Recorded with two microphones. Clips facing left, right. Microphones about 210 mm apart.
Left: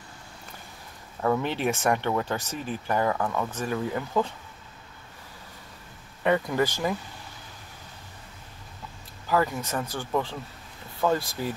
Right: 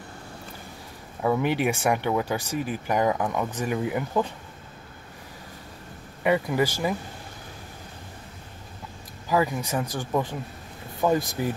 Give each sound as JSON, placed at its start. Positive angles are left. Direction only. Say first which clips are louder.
{"t": 1.2, "sound": "speech", "louder": "right 2 dB", "side_deg": -10}
{"t": 6.2, "sound": "speech", "louder": "right 1 dB", "side_deg": -10}
{"t": 9.3, "sound": "speech", "louder": "right 1 dB", "side_deg": -10}